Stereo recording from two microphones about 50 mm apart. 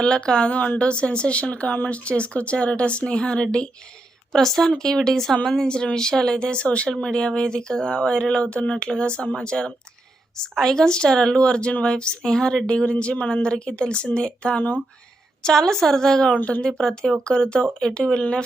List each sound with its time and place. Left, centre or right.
0.0 s speech: centre
4.3 s speech: centre